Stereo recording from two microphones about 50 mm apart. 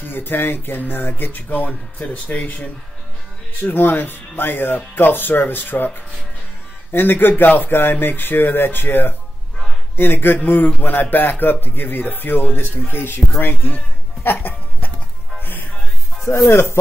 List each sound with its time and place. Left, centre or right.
0.1 s speech: left
3.6 s speech: left
6.9 s speech: left
14.2 s music: left
16.4 s music: left